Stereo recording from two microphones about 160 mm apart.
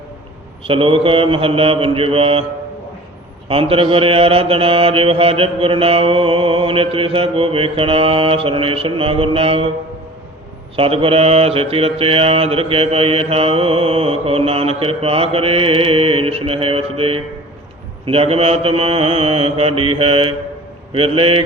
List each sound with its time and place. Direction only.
0.6 s mantra: 35° right (ahead or behind)
3.5 s mantra: 35° right (ahead or behind)
10.8 s mantra: 35° right (ahead or behind)